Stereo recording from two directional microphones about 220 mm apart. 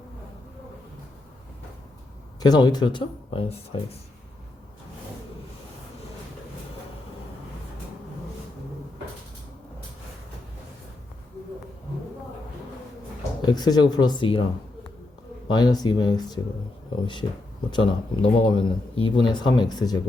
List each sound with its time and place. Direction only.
2.4 s speech: 20° left (ahead or behind)
13.4 s speech: 20° left (ahead or behind)
15.4 s speech: 20° left (ahead or behind)
17.7 s speech: 20° left (ahead or behind)